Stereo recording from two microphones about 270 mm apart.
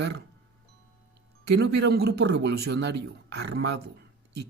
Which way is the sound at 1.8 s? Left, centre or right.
Right.